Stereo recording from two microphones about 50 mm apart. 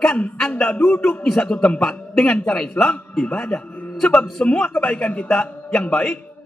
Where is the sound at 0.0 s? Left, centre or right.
Centre.